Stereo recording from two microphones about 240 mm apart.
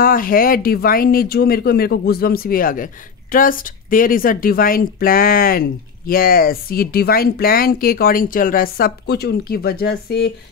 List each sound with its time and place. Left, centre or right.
0.0 s speech: left